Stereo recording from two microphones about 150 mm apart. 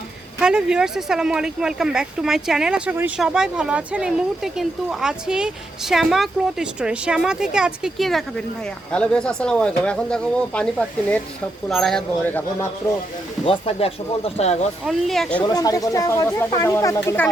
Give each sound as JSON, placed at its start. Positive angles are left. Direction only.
{"t": 0.3, "sound": "speech", "side_deg": -5}
{"t": 12.2, "sound": "speech", "side_deg": 10}
{"t": 13.4, "sound": "speech", "side_deg": 40}
{"t": 14.8, "sound": "speech", "side_deg": 0}
{"t": 15.4, "sound": "speech", "side_deg": 25}